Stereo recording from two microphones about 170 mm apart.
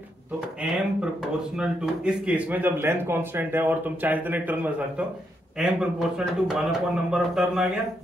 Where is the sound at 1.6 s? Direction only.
5° right (ahead or behind).